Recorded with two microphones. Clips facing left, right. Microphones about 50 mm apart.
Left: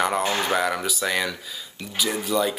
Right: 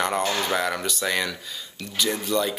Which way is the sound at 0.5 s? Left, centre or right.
Centre.